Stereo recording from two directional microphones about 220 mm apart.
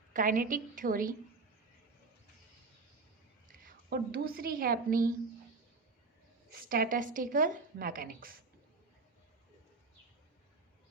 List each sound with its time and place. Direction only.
0.1 s a woman's voice: 35° right (ahead or behind)
3.7 s a woman's voice: 45° right (ahead or behind)
6.5 s a woman's voice: 40° right (ahead or behind)